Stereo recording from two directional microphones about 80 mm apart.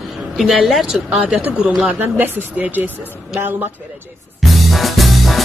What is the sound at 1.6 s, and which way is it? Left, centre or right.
Speech, centre.